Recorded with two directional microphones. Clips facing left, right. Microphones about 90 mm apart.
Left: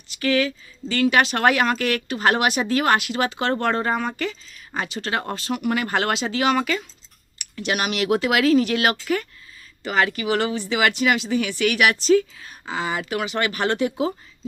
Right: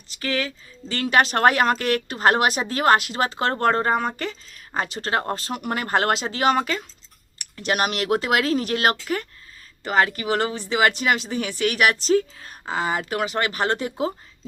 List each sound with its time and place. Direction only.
0.1 s speech: 35° right (ahead or behind)